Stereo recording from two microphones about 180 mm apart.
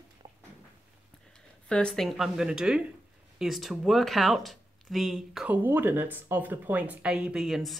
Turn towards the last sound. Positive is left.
turn(degrees=0)  # may be behind; listen again after turning